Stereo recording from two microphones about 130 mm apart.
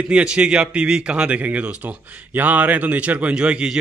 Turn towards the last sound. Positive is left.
turn(degrees=-10)  # may be behind; listen again after turning